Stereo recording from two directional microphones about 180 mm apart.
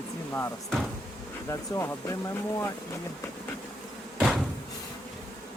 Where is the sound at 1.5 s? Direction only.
15° left (ahead or behind).